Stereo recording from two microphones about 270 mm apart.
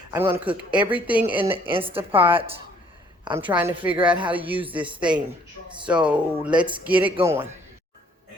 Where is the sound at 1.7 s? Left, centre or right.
Centre.